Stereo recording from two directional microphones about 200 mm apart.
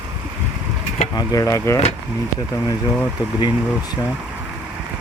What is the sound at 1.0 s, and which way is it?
Speech, 20° left (ahead or behind).